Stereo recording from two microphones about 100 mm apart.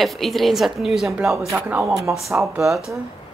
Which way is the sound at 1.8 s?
30° right (ahead or behind).